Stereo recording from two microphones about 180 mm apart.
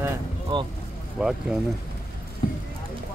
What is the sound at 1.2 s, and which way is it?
Speech, 5° right (ahead or behind).